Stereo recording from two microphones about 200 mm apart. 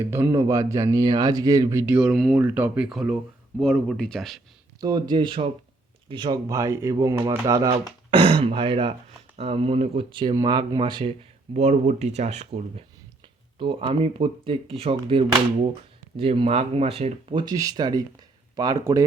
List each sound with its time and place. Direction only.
0.0 s speech: 10° right (ahead or behind)
4.8 s speech: 20° right (ahead or behind)
11.5 s speech: 35° right (ahead or behind); by 19.0 s 15° right (ahead or behind)